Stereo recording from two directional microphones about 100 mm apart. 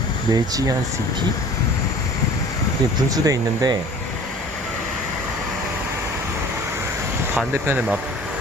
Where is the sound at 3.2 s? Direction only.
40° right (ahead or behind).